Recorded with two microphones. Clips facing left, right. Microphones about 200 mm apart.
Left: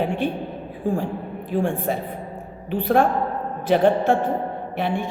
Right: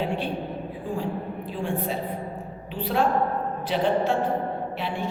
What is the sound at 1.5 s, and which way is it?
A woman's voice, 50° left (ahead or behind).